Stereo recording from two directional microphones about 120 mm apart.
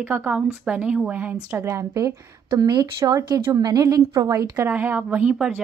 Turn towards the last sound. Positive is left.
turn(degrees=-10)  # may be behind; listen again after turning